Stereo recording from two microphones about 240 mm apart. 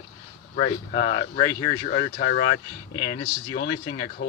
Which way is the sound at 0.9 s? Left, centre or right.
Left.